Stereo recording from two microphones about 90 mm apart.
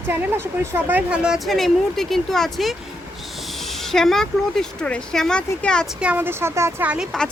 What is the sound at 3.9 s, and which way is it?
A woman's voice, 5° left (ahead or behind).